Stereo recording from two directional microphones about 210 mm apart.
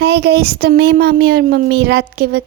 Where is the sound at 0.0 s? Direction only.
50° right (ahead or behind).